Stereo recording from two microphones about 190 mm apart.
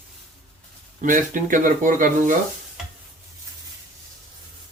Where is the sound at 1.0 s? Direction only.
45° right (ahead or behind).